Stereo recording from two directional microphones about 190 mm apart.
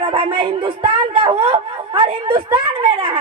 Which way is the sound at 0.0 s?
30° right (ahead or behind).